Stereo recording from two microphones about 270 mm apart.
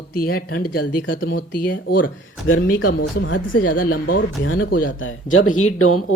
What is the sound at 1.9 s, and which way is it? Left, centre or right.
Speech, left.